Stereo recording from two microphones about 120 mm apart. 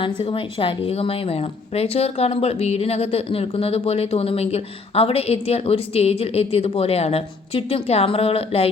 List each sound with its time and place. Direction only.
0.0 s a woman's voice: 45° left (ahead or behind)